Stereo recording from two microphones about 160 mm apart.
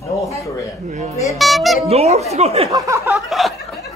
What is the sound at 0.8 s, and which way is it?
Speech, 50° right (ahead or behind).